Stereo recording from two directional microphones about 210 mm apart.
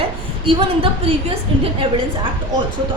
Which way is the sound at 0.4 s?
25° right (ahead or behind).